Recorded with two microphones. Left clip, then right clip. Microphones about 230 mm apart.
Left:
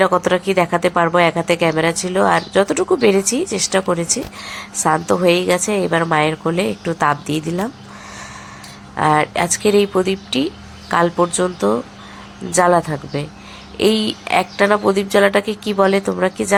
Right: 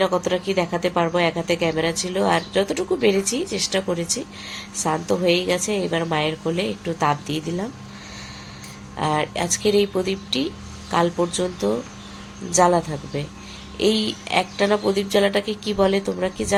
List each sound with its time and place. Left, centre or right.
0.0 s speech: centre
9.0 s speech: centre